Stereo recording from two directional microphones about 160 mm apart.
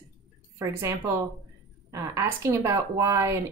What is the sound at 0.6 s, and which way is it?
A woman's voice, 15° right (ahead or behind).